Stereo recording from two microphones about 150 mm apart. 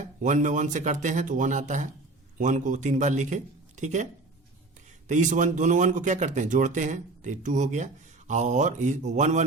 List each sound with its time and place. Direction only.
0.2 s speech: 55° right (ahead or behind)